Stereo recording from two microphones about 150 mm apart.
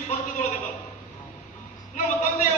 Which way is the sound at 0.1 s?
60° left (ahead or behind).